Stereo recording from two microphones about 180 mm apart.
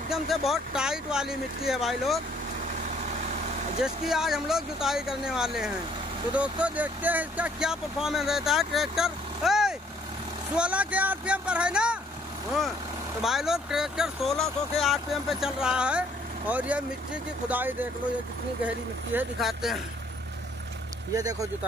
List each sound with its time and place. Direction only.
0.5 s speech: 5° right (ahead or behind)
3.8 s speech: centre (ahead or behind)
13.2 s speech: centre (ahead or behind)
19.1 s speech: centre (ahead or behind)
21.1 s speech: 20° right (ahead or behind)